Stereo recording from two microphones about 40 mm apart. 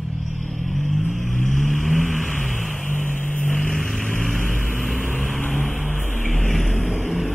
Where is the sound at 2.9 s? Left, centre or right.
Left.